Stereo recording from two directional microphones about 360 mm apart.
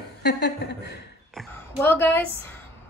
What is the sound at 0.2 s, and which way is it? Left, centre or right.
Speech, left.